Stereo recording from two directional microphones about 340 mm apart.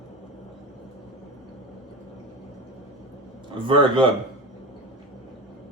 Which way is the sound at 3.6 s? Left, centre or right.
Centre.